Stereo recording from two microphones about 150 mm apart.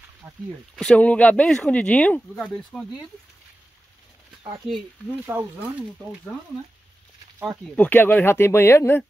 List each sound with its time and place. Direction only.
0.2 s speech: 15° right (ahead or behind)
0.7 s speech: 5° left (ahead or behind)
5.2 s speech: 10° right (ahead or behind)
7.4 s speech: 5° left (ahead or behind)